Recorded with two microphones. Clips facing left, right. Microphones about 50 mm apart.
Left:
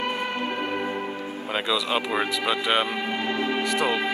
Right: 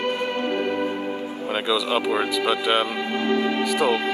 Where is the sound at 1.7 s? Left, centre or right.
Centre.